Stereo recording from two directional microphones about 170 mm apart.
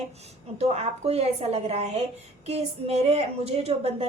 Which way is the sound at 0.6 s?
40° right (ahead or behind).